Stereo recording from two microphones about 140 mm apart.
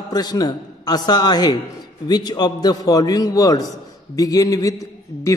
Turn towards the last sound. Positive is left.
turn(degrees=25)  # may be behind; listen again after turning